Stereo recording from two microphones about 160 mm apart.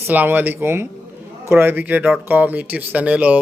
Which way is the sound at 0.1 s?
10° right (ahead or behind).